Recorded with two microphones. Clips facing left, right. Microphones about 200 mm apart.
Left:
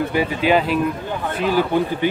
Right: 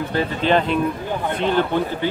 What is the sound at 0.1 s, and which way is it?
Speech, 10° left (ahead or behind).